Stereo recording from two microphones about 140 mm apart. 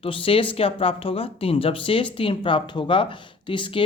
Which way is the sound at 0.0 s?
40° left (ahead or behind).